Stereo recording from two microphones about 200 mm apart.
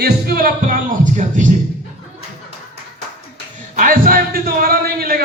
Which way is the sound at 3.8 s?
45° right (ahead or behind).